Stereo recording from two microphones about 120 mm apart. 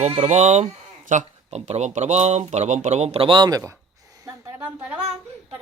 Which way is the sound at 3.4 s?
30° right (ahead or behind).